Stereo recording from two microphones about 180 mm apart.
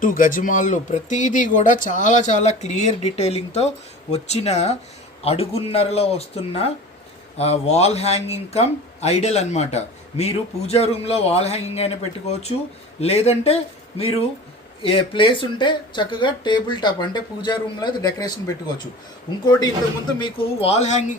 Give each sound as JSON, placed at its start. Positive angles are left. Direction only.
{"t": 0.0, "sound": "speech", "side_deg": 50}
{"t": 13.0, "sound": "speech", "side_deg": 35}
{"t": 14.8, "sound": "speech", "side_deg": 30}